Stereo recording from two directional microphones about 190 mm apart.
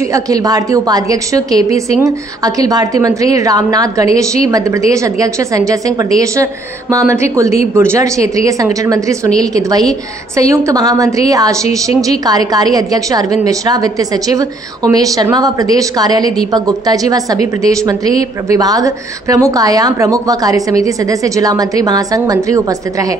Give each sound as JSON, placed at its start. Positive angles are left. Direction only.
{"t": 0.0, "sound": "a woman's voice", "side_deg": -15}